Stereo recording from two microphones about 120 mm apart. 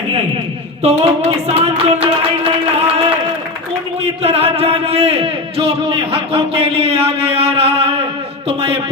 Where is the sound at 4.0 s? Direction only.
60° right (ahead or behind).